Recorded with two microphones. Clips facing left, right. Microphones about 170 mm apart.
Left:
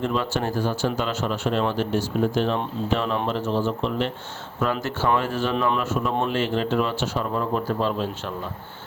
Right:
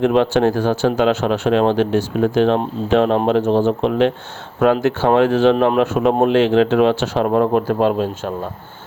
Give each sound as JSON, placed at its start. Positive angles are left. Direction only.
{"t": 0.0, "sound": "speech", "side_deg": -75}